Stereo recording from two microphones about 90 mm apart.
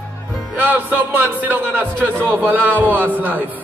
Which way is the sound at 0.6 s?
25° right (ahead or behind).